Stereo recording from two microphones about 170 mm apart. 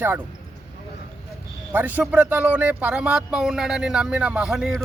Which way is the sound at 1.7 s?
10° right (ahead or behind).